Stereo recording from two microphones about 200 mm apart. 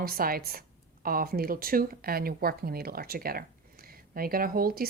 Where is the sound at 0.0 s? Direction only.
50° right (ahead or behind).